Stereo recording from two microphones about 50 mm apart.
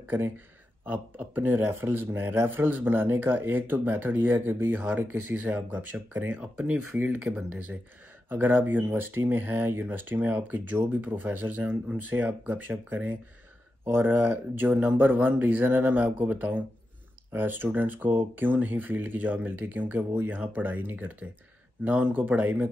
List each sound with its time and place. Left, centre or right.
0.8 s speech: right
6.3 s speech: right